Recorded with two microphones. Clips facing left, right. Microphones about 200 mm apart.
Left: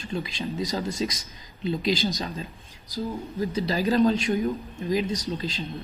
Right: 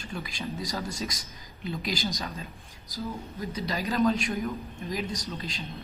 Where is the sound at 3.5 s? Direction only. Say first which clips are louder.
Left 6 dB; 30° left (ahead or behind).